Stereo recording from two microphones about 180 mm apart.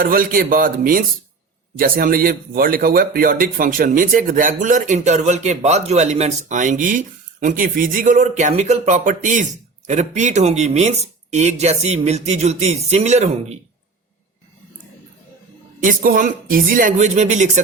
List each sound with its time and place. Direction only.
0.0 s speech: 50° right (ahead or behind)
15.8 s speech: 45° right (ahead or behind)